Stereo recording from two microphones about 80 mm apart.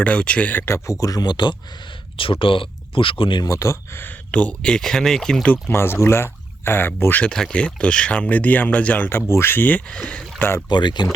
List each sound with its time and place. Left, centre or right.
0.0 s speech: centre
0.9 s speech: left
2.1 s speech: left
3.4 s speech: left
4.0 s speech: centre
5.5 s speech: left
7.3 s speech: centre
10.7 s speech: left